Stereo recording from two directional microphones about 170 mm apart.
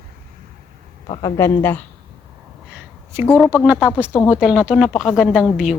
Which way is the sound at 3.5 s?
10° right (ahead or behind).